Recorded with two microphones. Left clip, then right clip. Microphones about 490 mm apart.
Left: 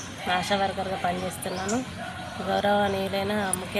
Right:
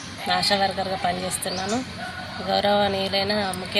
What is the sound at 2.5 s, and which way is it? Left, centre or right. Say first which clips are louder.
Speech: right 3 dB; left.